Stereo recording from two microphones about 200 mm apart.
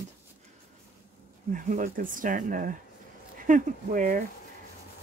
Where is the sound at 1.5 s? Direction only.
40° right (ahead or behind).